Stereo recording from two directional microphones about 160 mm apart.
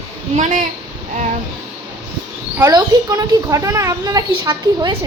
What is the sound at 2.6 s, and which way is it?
A child's voice, 25° right (ahead or behind).